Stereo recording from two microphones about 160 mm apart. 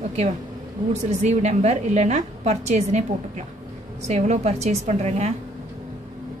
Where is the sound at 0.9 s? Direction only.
45° right (ahead or behind).